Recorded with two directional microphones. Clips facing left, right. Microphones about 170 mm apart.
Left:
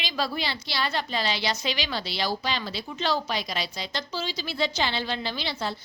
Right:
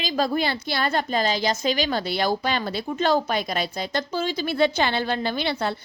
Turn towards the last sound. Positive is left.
turn(degrees=-60)  # may be behind; listen again after turning